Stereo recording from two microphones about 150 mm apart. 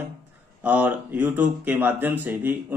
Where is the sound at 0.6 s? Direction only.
10° right (ahead or behind).